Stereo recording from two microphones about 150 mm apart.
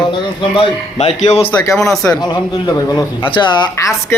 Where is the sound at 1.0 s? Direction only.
45° left (ahead or behind).